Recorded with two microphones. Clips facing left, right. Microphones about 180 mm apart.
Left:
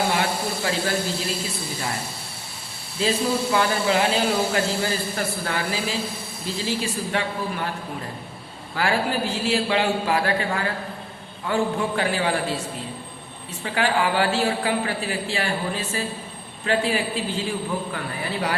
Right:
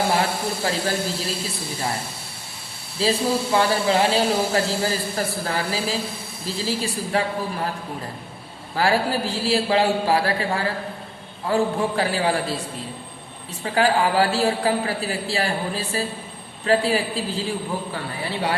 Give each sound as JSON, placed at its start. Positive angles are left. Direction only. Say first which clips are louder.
{"t": 0.1, "sound": "speech", "louder": "right 2 dB", "side_deg": -35}
{"t": 3.0, "sound": "speech", "louder": "right 1 dB", "side_deg": -35}
{"t": 8.7, "sound": "speech", "louder": "right 2 dB", "side_deg": -35}
{"t": 13.7, "sound": "a man's voice", "louder": "right 3 dB", "side_deg": -35}